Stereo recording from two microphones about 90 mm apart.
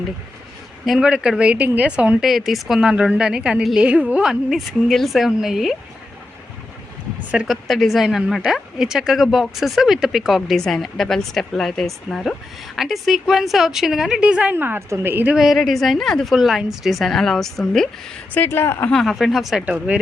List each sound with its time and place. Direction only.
0.9 s a woman's voice: 10° right (ahead or behind)
2.2 s a woman's voice: centre (ahead or behind)
7.4 s a woman's voice: centre (ahead or behind); by 15.4 s 20° right (ahead or behind)
15.4 s speech: centre (ahead or behind)
18.3 s speech: 25° left (ahead or behind)
18.9 s speech: centre (ahead or behind)
19.6 s a woman's voice: 15° right (ahead or behind)